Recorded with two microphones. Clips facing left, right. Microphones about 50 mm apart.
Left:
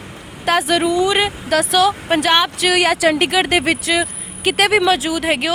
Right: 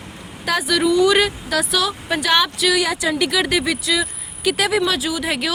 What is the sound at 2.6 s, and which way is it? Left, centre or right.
Speech, left.